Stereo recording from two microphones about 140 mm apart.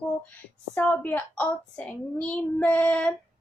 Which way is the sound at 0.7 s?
15° left (ahead or behind).